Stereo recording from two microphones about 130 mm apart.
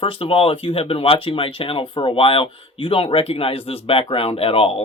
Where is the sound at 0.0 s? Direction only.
45° left (ahead or behind).